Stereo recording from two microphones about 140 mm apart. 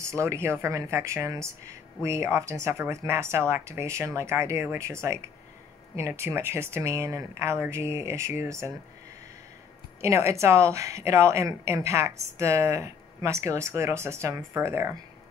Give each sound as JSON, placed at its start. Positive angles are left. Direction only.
{"t": 0.0, "sound": "a woman's voice", "side_deg": -20}
{"t": 10.0, "sound": "a woman's voice", "side_deg": -20}